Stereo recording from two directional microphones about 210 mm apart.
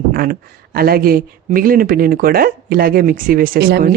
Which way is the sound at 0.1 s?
45° right (ahead or behind).